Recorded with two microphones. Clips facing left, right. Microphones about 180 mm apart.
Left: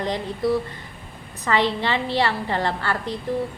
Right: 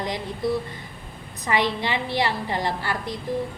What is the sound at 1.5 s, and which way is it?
A woman's voice, 15° right (ahead or behind).